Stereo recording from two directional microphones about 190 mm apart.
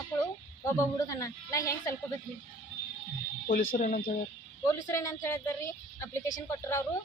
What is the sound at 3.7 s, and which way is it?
Speech, 45° left (ahead or behind).